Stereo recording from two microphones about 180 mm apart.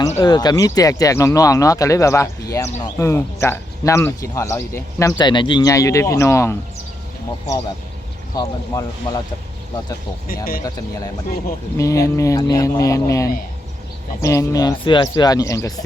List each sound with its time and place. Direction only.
0.2 s speech: 20° left (ahead or behind)
8.4 s speech: 20° left (ahead or behind)
10.2 s speech: 55° left (ahead or behind)
11.8 s speech: 15° left (ahead or behind)